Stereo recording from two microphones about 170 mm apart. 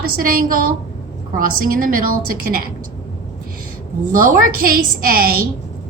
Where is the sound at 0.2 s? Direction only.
60° right (ahead or behind).